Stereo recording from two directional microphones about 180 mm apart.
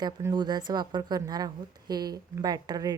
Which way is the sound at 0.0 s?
20° right (ahead or behind).